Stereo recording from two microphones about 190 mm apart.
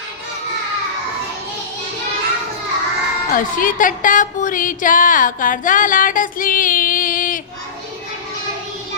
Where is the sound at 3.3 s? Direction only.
45° left (ahead or behind).